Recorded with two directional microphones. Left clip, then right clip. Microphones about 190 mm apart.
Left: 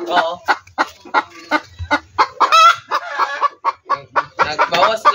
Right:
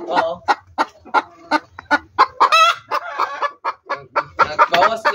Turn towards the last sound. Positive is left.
turn(degrees=-10)  # may be behind; listen again after turning